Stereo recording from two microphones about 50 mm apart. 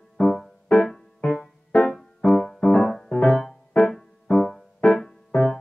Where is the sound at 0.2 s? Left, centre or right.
Centre.